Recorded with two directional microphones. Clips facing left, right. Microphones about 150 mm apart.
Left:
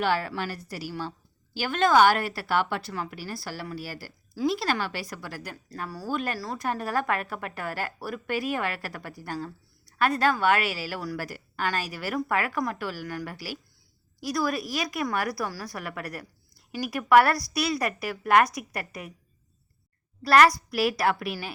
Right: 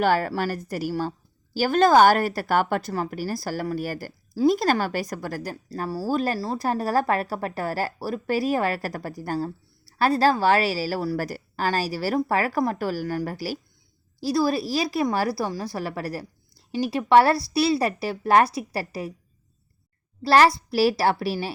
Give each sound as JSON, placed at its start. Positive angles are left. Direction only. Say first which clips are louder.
{"t": 0.0, "sound": "a woman's voice", "louder": "right 5 dB", "side_deg": -45}
{"t": 20.2, "sound": "a woman's voice", "louder": "right 2 dB", "side_deg": -30}